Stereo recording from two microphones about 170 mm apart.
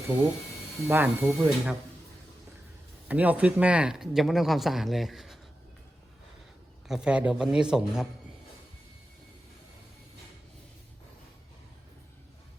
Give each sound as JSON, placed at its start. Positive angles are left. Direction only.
{"t": 0.9, "sound": "speech", "side_deg": -10}
{"t": 3.1, "sound": "speech", "side_deg": -10}
{"t": 6.8, "sound": "speech", "side_deg": -5}